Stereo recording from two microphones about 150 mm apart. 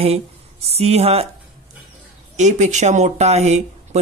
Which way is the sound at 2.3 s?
50° right (ahead or behind).